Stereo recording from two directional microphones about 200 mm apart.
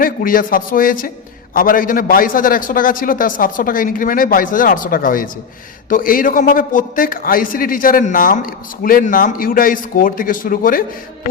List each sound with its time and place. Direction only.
0.0 s a man's voice: 45° left (ahead or behind)